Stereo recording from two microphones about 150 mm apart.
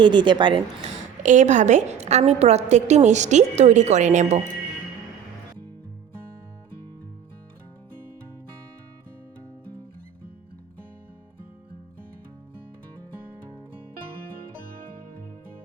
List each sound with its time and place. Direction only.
0.0 s speech: 30° right (ahead or behind)
1.2 s a woman's voice: 55° right (ahead or behind)